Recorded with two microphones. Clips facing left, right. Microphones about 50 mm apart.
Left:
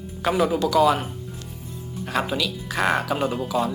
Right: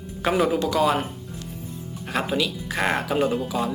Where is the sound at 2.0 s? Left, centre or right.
Centre.